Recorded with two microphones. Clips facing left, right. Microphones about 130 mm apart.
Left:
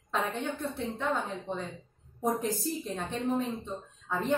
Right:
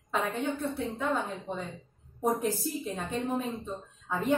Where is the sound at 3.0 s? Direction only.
5° right (ahead or behind).